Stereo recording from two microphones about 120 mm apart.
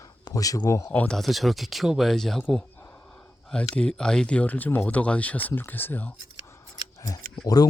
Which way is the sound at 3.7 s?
5° left (ahead or behind).